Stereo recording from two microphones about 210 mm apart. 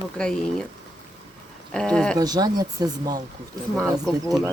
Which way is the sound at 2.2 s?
20° right (ahead or behind).